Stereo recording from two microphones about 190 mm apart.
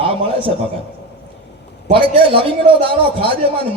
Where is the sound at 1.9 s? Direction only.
30° right (ahead or behind).